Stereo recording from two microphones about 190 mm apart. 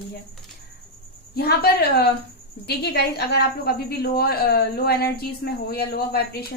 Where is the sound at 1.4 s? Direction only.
55° left (ahead or behind).